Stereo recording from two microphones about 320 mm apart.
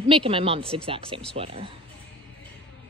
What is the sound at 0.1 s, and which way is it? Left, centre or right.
A woman's voice, centre.